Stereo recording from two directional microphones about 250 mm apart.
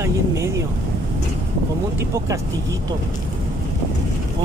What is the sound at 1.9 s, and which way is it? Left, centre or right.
Speech, centre.